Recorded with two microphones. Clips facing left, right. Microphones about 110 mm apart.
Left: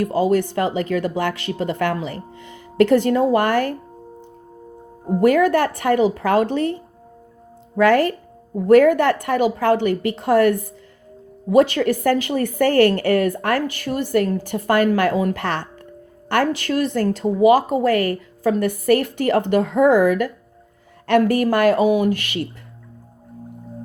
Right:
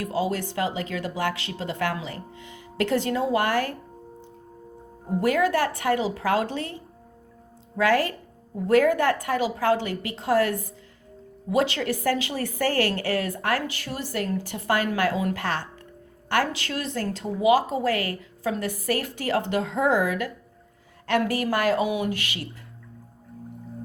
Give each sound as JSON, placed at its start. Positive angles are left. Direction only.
{"t": 0.1, "sound": "a woman's voice", "side_deg": 55}
{"t": 5.0, "sound": "a woman's voice", "side_deg": 50}
{"t": 8.7, "sound": "a woman's voice", "side_deg": 55}
{"t": 11.5, "sound": "a woman's voice", "side_deg": 50}